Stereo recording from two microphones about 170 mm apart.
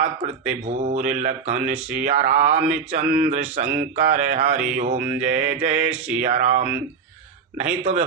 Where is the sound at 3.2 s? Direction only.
40° right (ahead or behind).